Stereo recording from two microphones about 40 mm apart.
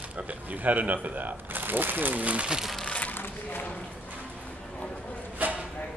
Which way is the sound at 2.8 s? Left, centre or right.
Left.